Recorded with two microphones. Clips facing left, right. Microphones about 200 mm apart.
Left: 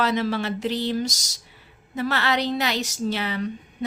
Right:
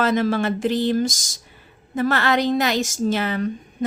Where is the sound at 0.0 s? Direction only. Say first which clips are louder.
Right 4 dB; 50° right (ahead or behind).